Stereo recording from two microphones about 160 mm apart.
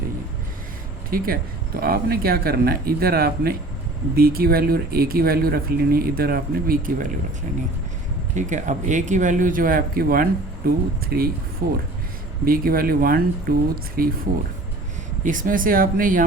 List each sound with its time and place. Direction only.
1.1 s speech: 65° right (ahead or behind)
8.4 s speech: 50° right (ahead or behind); by 14.1 s 65° right (ahead or behind)
15.2 s speech: 55° right (ahead or behind)